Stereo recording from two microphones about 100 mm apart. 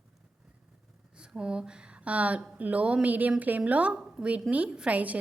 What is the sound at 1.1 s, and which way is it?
A woman's voice, 10° right (ahead or behind).